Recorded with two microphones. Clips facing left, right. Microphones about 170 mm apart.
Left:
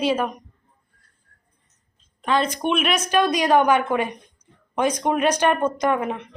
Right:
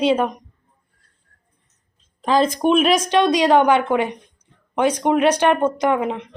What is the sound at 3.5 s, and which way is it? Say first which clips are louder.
Speech: right 3 dB; 15° right (ahead or behind).